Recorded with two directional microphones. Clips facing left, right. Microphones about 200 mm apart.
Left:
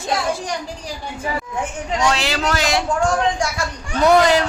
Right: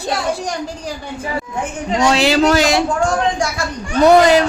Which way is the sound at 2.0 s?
30° right (ahead or behind).